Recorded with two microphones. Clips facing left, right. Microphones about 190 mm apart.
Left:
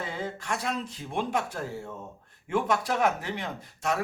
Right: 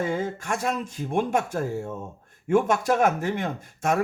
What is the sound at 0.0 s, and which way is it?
Speech, 50° right (ahead or behind).